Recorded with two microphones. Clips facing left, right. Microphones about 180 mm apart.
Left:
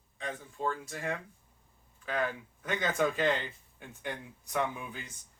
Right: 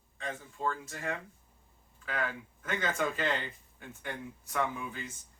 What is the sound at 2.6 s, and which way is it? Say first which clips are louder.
Speech: left 2 dB; 15° left (ahead or behind).